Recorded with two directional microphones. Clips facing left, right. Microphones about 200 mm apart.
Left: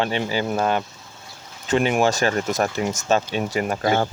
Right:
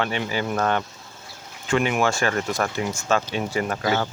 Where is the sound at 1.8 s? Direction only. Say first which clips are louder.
Left 4 dB; 35° left (ahead or behind).